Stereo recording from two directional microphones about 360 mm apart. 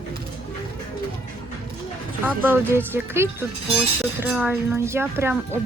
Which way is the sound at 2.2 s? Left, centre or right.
Centre.